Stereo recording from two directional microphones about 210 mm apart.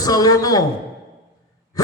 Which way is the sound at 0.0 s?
20° left (ahead or behind).